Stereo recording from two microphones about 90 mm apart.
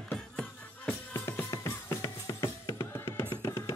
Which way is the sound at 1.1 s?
30° left (ahead or behind).